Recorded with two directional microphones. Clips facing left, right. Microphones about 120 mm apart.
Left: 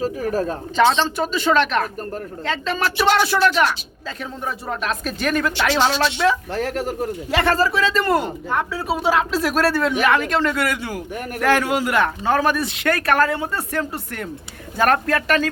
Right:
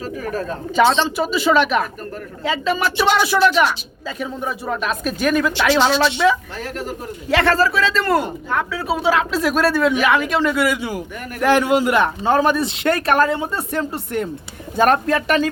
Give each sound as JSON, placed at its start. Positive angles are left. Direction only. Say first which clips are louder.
{"t": 0.0, "sound": "speech", "louder": "left 3 dB", "side_deg": 35}
{"t": 0.8, "sound": "speech", "louder": "right 1 dB", "side_deg": -5}
{"t": 6.5, "sound": "speech", "louder": "left 4 dB", "side_deg": 70}
{"t": 7.3, "sound": "speech", "louder": "right 3 dB", "side_deg": 10}